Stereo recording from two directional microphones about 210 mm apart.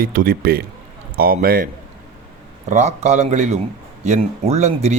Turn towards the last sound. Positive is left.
turn(degrees=-30)  # may be behind; listen again after turning